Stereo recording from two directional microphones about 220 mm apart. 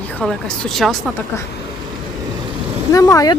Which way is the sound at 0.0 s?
5° left (ahead or behind).